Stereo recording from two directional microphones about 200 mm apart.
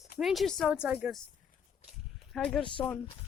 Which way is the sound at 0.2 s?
Centre (ahead or behind).